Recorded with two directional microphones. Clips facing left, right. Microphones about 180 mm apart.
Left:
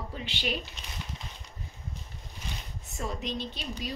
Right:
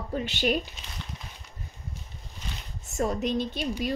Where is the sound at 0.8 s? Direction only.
Centre (ahead or behind).